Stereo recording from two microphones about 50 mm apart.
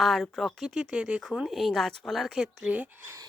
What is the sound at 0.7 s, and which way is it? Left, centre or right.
Speech, centre.